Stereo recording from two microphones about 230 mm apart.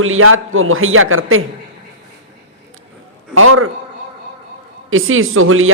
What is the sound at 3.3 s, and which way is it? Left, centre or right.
Speech, right.